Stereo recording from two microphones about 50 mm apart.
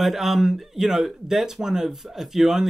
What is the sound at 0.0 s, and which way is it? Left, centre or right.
Speech, centre.